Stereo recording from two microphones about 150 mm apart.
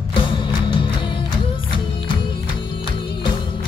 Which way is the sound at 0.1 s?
30° left (ahead or behind).